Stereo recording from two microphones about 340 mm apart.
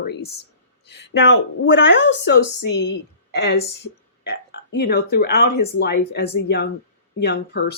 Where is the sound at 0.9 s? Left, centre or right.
Left.